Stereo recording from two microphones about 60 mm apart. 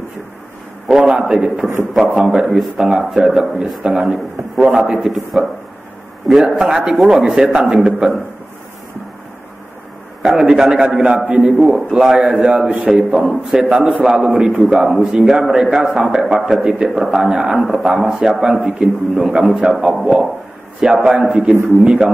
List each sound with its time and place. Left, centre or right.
0.9 s a man's voice: centre
10.2 s a man's voice: centre
11.5 s a man's voice: centre
20.8 s a man's voice: centre